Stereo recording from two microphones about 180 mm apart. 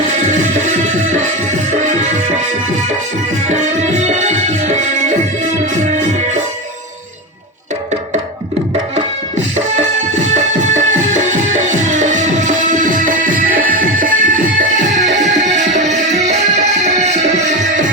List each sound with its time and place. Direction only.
0.1 s music: 40° right (ahead or behind)
3.4 s music: 40° right (ahead or behind)
10.5 s music: 40° right (ahead or behind)